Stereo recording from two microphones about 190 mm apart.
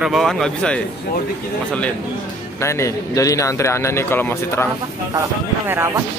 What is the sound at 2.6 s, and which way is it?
A man's voice, 15° left (ahead or behind).